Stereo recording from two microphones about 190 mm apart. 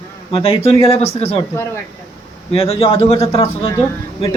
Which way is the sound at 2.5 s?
30° left (ahead or behind).